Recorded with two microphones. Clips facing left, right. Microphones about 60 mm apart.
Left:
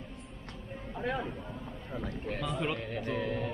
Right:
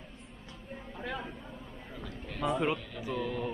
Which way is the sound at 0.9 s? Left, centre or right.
Centre.